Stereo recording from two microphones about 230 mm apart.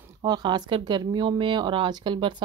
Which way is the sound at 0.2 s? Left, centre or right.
Centre.